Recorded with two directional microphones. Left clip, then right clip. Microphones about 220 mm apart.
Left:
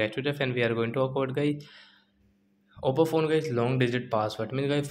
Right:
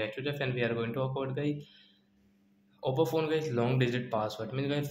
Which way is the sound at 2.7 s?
30° left (ahead or behind).